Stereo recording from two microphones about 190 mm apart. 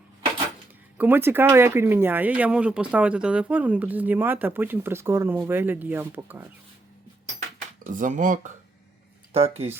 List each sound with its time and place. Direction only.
0.9 s speech: 10° right (ahead or behind)
7.9 s speech: 40° right (ahead or behind)